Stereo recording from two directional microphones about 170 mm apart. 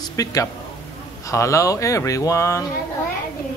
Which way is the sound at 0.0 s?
20° left (ahead or behind).